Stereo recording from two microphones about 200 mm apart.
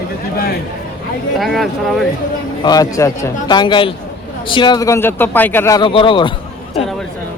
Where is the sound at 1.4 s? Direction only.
Centre (ahead or behind).